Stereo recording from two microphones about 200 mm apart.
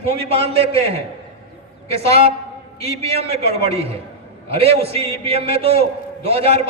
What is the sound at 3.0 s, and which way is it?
A man's voice, 30° right (ahead or behind).